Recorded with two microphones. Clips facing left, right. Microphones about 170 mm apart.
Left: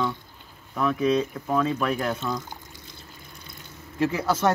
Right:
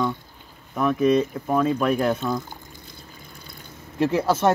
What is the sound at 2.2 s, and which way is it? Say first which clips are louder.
Speech: right 4 dB; 15° right (ahead or behind).